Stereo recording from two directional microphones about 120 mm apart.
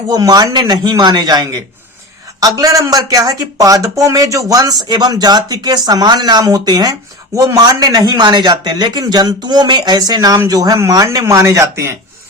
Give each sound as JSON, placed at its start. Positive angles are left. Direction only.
{"t": 0.1, "sound": "speech", "side_deg": -35}